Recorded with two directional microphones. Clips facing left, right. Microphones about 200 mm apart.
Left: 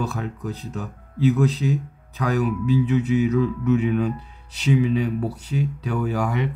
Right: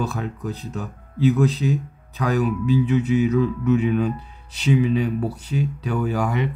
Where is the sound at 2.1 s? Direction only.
25° right (ahead or behind).